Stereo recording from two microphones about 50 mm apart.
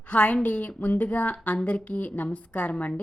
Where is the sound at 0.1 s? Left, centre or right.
Left.